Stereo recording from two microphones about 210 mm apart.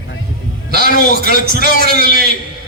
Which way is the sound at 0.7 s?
45° right (ahead or behind).